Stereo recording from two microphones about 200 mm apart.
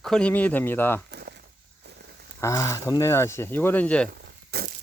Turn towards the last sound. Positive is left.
turn(degrees=-50)  # may be behind; listen again after turning